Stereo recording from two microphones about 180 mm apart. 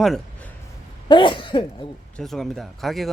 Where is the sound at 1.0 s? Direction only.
25° left (ahead or behind).